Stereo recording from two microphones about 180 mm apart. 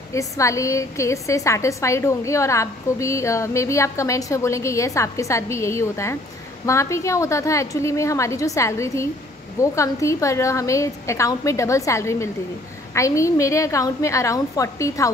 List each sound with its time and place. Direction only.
0.1 s a woman's voice: 15° left (ahead or behind)